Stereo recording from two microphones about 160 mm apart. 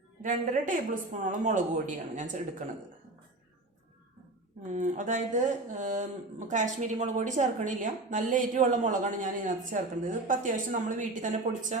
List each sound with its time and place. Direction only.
0.2 s a woman's voice: 55° right (ahead or behind)
4.6 s a woman's voice: 50° right (ahead or behind)